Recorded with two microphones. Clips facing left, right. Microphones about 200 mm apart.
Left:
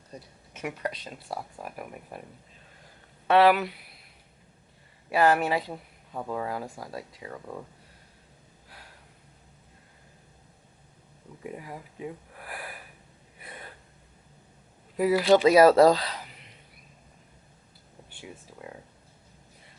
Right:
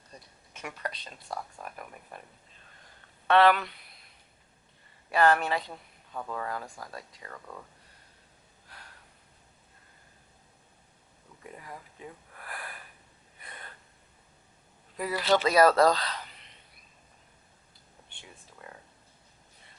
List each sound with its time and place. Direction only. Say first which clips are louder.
0.5 s speech: left 5 dB; 10° left (ahead or behind)
3.2 s speech: left 2 dB; 5° left (ahead or behind)
5.0 s speech: left 2 dB; 5° left (ahead or behind)
6.1 s speech: left 4 dB; 15° left (ahead or behind)
8.7 s a sound: left 1 dB; 5° left (ahead or behind)
11.4 s a sound: left 6 dB; 10° left (ahead or behind)
13.4 s gasp: left 4 dB; 5° left (ahead or behind)
14.9 s speech: left 6 dB; 5° left (ahead or behind)
18.1 s a sound: left 9 dB; 10° left (ahead or behind)